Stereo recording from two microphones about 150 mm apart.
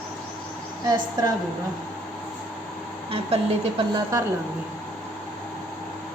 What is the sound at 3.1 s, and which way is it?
Speech, 40° right (ahead or behind).